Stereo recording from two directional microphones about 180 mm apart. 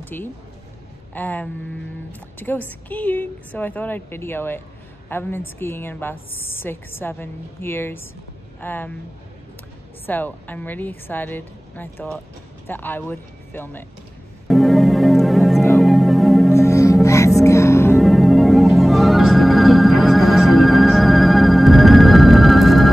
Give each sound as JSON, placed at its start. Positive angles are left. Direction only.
{"t": 0.0, "sound": "a woman's voice", "side_deg": 10}
{"t": 10.0, "sound": "a woman's voice", "side_deg": 10}
{"t": 14.5, "sound": "music", "side_deg": 0}
{"t": 16.5, "sound": "music", "side_deg": 15}
{"t": 17.9, "sound": "organ", "side_deg": 0}